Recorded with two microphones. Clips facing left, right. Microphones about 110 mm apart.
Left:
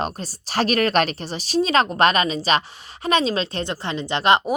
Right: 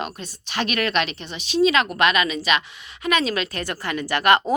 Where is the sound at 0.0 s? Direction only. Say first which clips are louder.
Left 4 dB; 35° left (ahead or behind).